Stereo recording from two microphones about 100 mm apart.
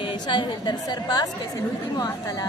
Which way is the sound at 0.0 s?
55° left (ahead or behind).